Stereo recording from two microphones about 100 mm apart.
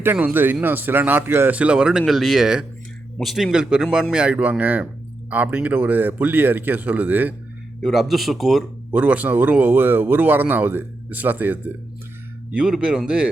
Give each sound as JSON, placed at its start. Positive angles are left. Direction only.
{"t": 0.0, "sound": "a man's voice", "side_deg": -20}
{"t": 7.8, "sound": "speech", "side_deg": 0}
{"t": 8.9, "sound": "speech", "side_deg": -15}